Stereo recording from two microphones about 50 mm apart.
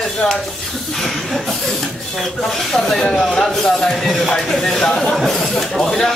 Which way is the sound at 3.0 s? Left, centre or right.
Centre.